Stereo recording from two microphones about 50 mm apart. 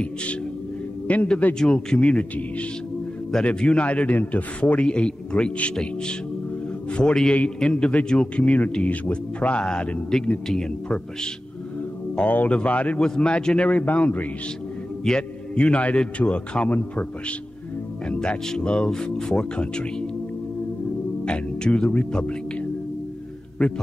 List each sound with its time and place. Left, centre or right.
1.0 s a man's voice: left
1.5 s speech: centre
2.0 s a man's voice: left
3.4 s a man's voice: left
10.1 s speech: centre
12.2 s a man's voice: left
13.0 s a man's voice: centre; by 14.2 s left
15.0 s a man's voice: centre
18.0 s a man's voice: left
21.3 s a man's voice: centre
23.6 s speech: centre